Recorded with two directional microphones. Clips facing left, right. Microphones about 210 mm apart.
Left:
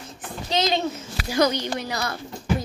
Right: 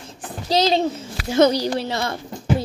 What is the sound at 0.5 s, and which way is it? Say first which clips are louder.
A woman's voice: right 5 dB; 35° right (ahead or behind).